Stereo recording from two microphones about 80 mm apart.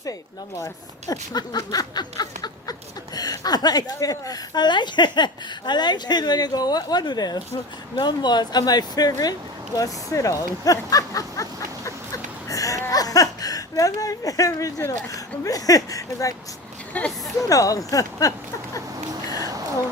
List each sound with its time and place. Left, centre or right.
0.0 s speech: left
1.1 s speech: left
7.9 s speech: left
11.9 s a sound: left
14.8 s speech: left
16.9 s speech: left
17.5 s speech: left